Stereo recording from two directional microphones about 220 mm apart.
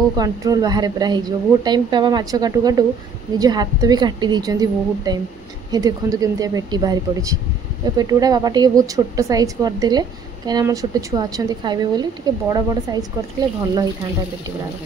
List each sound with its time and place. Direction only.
0.2 s speech: 15° right (ahead or behind)